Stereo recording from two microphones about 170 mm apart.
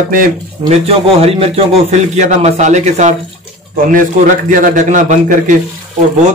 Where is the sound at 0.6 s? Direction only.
35° right (ahead or behind).